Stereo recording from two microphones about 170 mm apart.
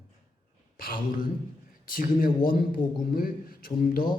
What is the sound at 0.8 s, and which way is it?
A man's voice, 55° left (ahead or behind).